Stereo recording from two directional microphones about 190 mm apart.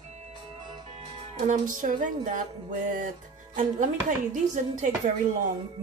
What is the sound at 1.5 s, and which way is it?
Music, 45° right (ahead or behind).